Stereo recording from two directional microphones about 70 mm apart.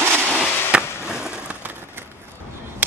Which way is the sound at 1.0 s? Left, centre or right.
Centre.